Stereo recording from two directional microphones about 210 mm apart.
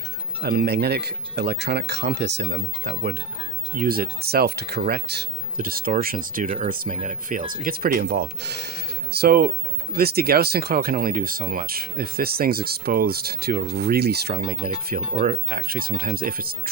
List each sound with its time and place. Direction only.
0.4 s speech: 50° right (ahead or behind)